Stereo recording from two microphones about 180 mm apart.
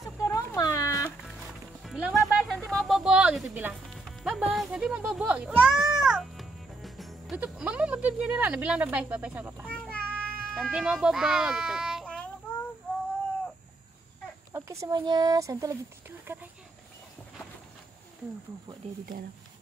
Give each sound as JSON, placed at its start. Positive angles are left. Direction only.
{"t": 0.2, "sound": "a sound", "side_deg": 15}
{"t": 1.8, "sound": "music", "side_deg": -5}
{"t": 2.7, "sound": "speech", "side_deg": 0}
{"t": 5.5, "sound": "music", "side_deg": 0}
{"t": 9.7, "sound": "child singing", "side_deg": 5}
{"t": 10.4, "sound": "a child's voice", "side_deg": 5}
{"t": 14.5, "sound": "speech", "side_deg": -15}
{"t": 16.3, "sound": "a sound", "side_deg": -10}